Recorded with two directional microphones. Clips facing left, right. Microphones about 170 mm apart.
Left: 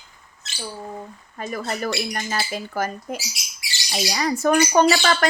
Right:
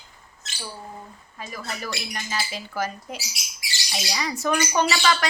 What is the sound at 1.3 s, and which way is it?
Speech, 50° left (ahead or behind).